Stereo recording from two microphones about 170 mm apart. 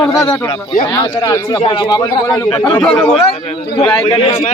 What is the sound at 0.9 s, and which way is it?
A man's voice, 25° left (ahead or behind).